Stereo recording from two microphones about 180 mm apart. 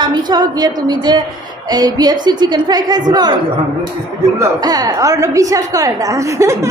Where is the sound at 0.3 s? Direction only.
20° right (ahead or behind).